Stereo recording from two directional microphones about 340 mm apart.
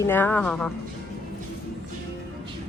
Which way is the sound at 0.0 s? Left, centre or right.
Centre.